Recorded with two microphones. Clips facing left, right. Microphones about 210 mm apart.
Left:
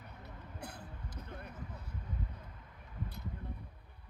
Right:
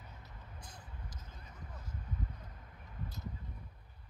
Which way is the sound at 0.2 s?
65° left (ahead or behind).